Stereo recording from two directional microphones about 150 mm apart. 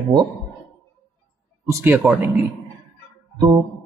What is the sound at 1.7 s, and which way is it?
Speech, 15° right (ahead or behind).